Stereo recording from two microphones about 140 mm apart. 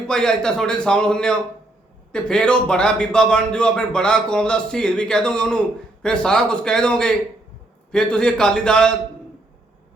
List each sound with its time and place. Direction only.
0.1 s a man's voice: 5° left (ahead or behind)